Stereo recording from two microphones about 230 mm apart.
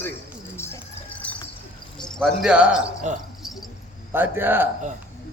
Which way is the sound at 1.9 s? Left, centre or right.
Centre.